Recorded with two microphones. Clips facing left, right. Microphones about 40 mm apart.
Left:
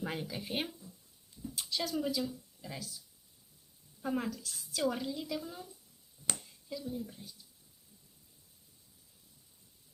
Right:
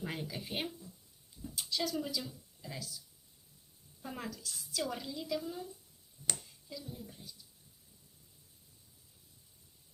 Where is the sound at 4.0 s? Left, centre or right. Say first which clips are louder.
Left 8 dB; centre.